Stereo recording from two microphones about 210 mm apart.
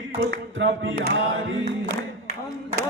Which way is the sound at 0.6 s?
60° right (ahead or behind).